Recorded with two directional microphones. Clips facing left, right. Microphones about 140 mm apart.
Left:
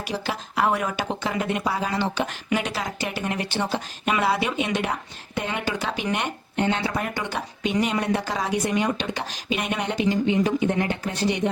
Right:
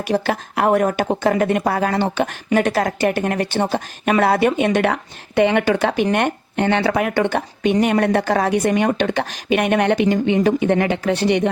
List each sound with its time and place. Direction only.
0.0 s a woman's voice: 55° right (ahead or behind)